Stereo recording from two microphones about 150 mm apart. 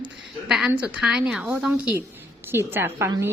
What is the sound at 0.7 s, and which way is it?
A woman's voice, 10° right (ahead or behind).